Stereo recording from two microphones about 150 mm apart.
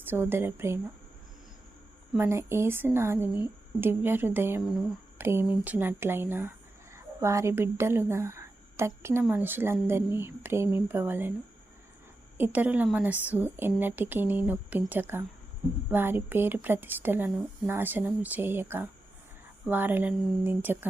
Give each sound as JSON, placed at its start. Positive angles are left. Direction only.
{"t": 0.0, "sound": "speech", "side_deg": -15}
{"t": 2.1, "sound": "speech", "side_deg": -15}
{"t": 12.4, "sound": "speech", "side_deg": -10}